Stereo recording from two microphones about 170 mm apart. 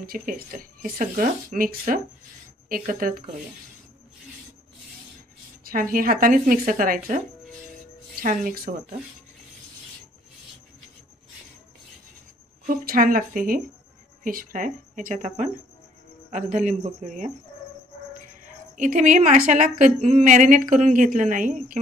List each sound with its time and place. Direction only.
0.0 s speech: 55° right (ahead or behind)
5.6 s speech: 55° right (ahead or behind)
8.2 s speech: 55° right (ahead or behind)
12.6 s a woman's voice: 55° right (ahead or behind)
18.4 s a woman's voice: 50° right (ahead or behind)